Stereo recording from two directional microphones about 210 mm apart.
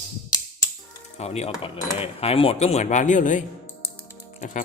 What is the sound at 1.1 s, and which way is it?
Speech, 30° left (ahead or behind).